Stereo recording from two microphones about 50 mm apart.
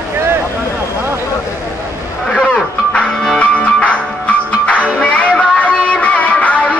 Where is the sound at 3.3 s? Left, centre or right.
Left.